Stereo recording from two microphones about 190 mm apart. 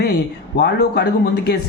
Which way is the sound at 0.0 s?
60° left (ahead or behind).